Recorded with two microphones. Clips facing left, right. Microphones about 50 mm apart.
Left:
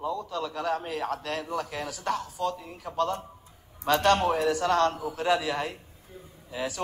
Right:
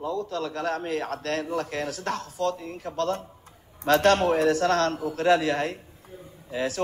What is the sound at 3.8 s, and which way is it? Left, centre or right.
A man's voice, centre.